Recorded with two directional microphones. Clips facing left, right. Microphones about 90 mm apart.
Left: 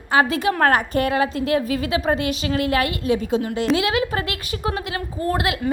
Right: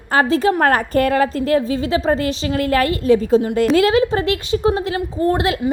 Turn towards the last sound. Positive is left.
turn(degrees=-30)  # may be behind; listen again after turning